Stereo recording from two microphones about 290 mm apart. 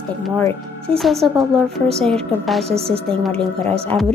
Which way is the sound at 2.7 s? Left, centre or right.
Centre.